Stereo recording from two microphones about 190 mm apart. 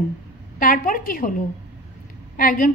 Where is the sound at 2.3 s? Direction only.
45° left (ahead or behind).